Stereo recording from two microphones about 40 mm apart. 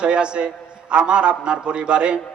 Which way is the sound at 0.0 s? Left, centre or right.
Right.